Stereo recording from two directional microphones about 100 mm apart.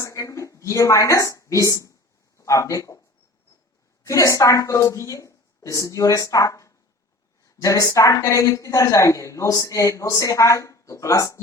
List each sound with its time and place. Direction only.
0.0 s a woman's voice: 30° left (ahead or behind)
4.0 s a woman's voice: 30° left (ahead or behind)